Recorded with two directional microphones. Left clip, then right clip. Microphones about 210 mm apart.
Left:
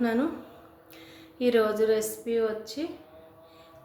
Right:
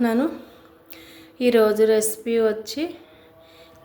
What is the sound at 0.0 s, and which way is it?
A woman's voice, 30° right (ahead or behind).